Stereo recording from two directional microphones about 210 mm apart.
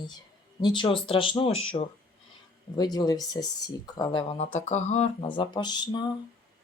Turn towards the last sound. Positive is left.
turn(degrees=20)  # may be behind; listen again after turning